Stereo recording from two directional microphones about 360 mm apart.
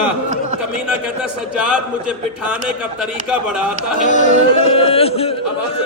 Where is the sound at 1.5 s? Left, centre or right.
Centre.